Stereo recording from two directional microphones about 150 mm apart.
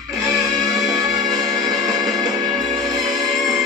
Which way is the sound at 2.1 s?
25° right (ahead or behind).